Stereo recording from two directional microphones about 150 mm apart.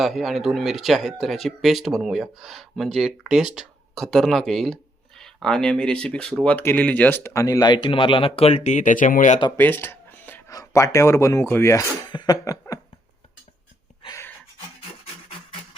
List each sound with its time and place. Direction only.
0.0 s speech: centre (ahead or behind); by 9.4 s 60° left (ahead or behind)
9.6 s a sound: 15° left (ahead or behind)
10.5 s speech: 20° left (ahead or behind)